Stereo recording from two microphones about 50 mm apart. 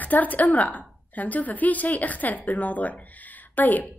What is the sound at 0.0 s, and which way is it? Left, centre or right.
A woman's voice, left.